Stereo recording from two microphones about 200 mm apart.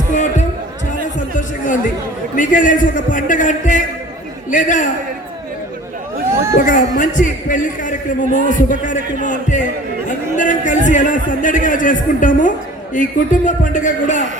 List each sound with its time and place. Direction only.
0.1 s a sound: 35° left (ahead or behind)
1.4 s a man's voice: 40° left (ahead or behind)
6.6 s a man's voice: 40° left (ahead or behind)